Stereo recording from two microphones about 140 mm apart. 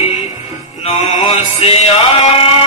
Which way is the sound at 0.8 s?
45° left (ahead or behind).